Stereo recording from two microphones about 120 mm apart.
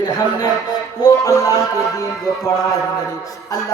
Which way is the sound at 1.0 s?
30° left (ahead or behind).